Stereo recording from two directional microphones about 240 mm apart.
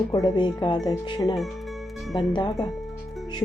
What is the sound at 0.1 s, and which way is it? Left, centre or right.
Speech, centre.